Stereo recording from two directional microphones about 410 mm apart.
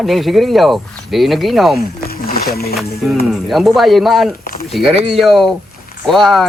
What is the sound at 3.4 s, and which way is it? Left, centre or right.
Speech, centre.